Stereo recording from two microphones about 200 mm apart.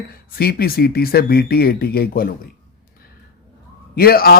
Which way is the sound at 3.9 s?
50° left (ahead or behind).